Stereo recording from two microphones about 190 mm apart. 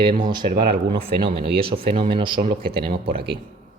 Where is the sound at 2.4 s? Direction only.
50° right (ahead or behind).